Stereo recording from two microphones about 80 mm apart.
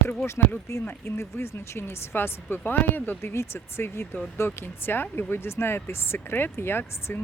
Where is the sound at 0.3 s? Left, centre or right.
Left.